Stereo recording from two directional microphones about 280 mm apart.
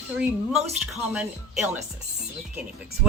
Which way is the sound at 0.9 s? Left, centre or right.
Centre.